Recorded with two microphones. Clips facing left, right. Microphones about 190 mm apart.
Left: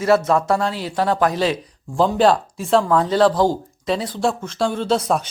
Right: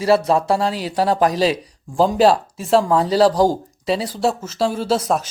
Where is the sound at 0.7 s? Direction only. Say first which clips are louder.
Right 2 dB; 15° right (ahead or behind).